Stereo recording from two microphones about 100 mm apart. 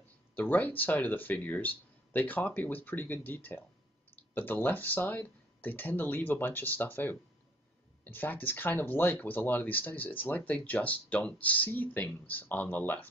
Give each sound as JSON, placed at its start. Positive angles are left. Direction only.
{"t": 0.4, "sound": "speech", "side_deg": 15}